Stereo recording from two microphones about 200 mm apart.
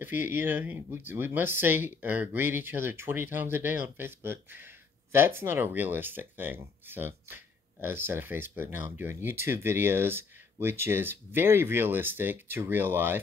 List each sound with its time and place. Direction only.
0.0 s speech: 10° right (ahead or behind)